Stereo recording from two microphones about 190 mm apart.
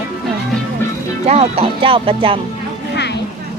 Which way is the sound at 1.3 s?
30° right (ahead or behind).